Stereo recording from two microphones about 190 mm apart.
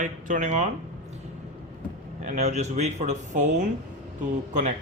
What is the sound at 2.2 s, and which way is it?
Speech, 40° right (ahead or behind).